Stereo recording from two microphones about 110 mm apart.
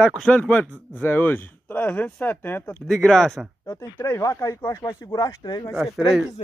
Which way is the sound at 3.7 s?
25° left (ahead or behind).